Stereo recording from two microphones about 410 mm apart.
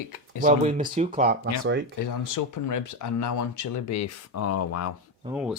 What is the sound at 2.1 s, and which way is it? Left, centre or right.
Speech, left.